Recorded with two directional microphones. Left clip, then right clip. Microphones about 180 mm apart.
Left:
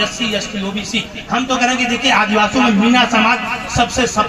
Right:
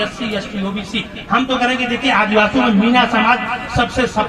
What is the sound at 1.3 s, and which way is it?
A man's voice, 15° left (ahead or behind).